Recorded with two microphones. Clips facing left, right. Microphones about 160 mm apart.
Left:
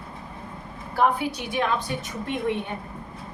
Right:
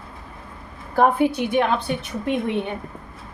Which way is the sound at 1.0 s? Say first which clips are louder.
Right 5 dB; 50° right (ahead or behind).